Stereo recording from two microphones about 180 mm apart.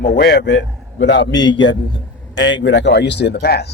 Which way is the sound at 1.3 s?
25° left (ahead or behind).